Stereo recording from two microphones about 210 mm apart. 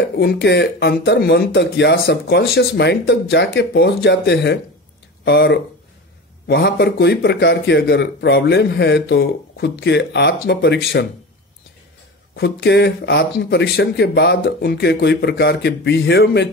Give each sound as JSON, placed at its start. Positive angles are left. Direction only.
{"t": 0.2, "sound": "a man's voice", "side_deg": 50}
{"t": 12.4, "sound": "a man's voice", "side_deg": 50}